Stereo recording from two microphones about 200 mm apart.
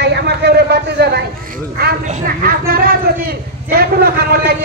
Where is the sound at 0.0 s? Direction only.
55° right (ahead or behind).